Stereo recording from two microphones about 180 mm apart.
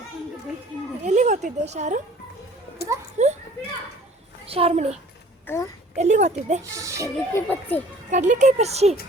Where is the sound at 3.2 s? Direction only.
40° right (ahead or behind).